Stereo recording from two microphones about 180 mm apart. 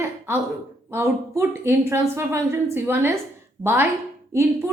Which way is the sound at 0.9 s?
15° right (ahead or behind).